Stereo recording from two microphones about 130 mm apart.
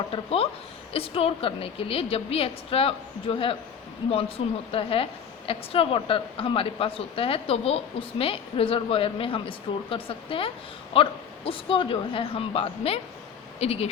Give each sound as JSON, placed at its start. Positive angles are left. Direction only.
{"t": 0.1, "sound": "a woman's voice", "side_deg": 45}
{"t": 4.7, "sound": "a woman's voice", "side_deg": 45}